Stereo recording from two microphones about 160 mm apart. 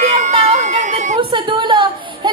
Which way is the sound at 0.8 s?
50° right (ahead or behind).